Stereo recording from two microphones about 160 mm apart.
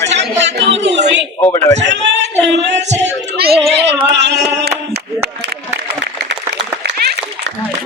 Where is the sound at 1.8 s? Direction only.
90° right.